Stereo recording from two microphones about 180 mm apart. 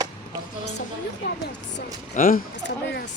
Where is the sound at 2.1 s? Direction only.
50° left (ahead or behind).